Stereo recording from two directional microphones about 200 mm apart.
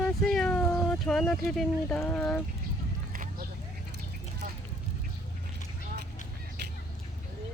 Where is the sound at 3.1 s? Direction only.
45° right (ahead or behind).